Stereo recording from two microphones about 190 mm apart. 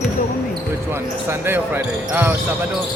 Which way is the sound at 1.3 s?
10° right (ahead or behind).